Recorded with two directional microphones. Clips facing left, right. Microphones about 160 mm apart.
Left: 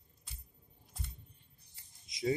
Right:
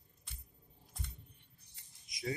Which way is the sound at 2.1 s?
25° left (ahead or behind).